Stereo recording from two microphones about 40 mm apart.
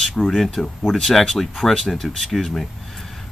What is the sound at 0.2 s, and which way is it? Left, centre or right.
Speech, centre.